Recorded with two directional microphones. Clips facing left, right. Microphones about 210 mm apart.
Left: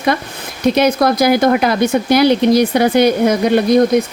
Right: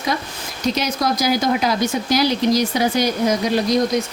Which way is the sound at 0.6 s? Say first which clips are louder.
Left 8 dB; 60° left (ahead or behind).